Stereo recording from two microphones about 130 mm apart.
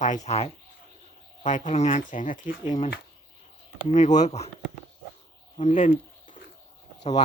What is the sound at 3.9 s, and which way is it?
Speech, 70° left (ahead or behind).